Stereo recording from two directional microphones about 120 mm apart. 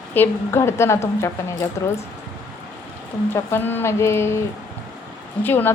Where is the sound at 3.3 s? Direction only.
20° left (ahead or behind).